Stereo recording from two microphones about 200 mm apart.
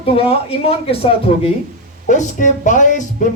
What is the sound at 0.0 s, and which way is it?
Speech, 30° left (ahead or behind).